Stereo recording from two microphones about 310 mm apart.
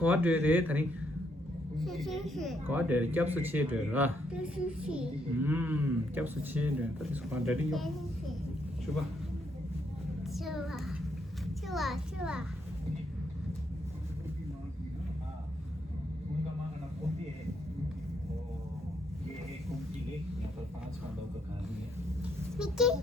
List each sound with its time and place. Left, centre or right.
0.0 s speech: centre
10.3 s a child's voice: centre
22.2 s a sound: centre